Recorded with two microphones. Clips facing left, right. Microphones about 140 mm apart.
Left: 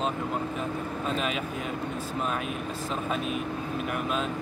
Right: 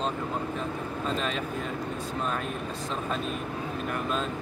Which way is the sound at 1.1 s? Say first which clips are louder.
Left 1 dB; 10° left (ahead or behind).